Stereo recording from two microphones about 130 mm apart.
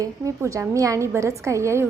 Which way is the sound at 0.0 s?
25° right (ahead or behind).